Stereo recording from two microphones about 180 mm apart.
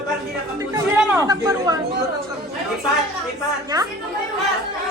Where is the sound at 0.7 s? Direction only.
20° right (ahead or behind).